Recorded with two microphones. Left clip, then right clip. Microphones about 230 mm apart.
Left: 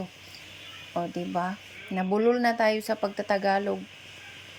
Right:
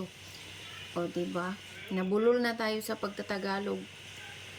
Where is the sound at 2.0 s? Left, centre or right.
Centre.